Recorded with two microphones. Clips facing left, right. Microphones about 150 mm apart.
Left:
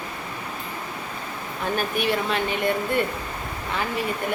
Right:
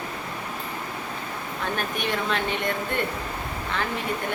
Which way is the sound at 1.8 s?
5° left (ahead or behind).